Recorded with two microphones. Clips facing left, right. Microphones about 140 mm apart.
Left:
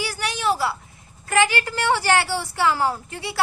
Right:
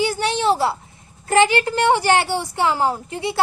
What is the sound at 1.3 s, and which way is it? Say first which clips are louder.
A woman's voice: right 5 dB; 25° right (ahead or behind).